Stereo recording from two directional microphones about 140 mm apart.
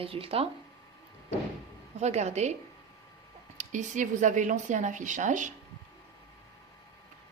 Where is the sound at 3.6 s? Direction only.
60° right (ahead or behind).